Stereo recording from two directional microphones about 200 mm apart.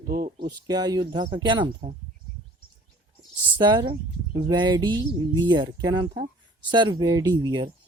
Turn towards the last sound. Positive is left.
turn(degrees=-20)  # may be behind; listen again after turning